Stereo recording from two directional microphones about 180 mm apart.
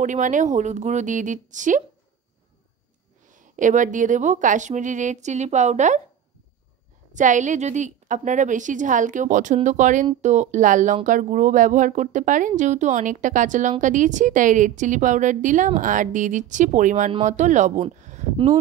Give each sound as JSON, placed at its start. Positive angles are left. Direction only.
{"t": 0.0, "sound": "speech", "side_deg": -45}
{"t": 3.3, "sound": "speech", "side_deg": -45}
{"t": 7.2, "sound": "speech", "side_deg": -45}